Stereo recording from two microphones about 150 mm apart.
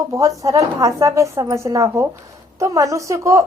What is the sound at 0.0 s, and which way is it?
Speech, 25° right (ahead or behind).